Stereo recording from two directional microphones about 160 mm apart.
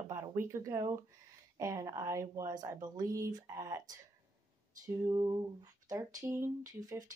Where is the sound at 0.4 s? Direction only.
15° right (ahead or behind).